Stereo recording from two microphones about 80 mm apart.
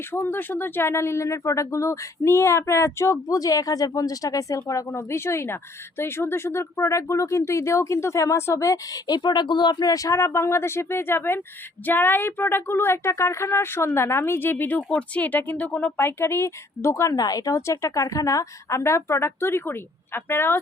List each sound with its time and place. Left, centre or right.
0.1 s speech: left
4.9 s speech: left
9.9 s speech: left
14.8 s speech: centre
16.0 s speech: left